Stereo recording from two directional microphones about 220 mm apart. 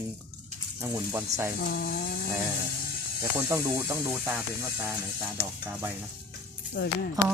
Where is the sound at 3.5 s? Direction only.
15° right (ahead or behind).